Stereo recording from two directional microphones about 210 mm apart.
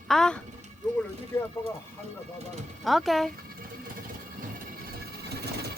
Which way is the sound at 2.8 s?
Centre (ahead or behind).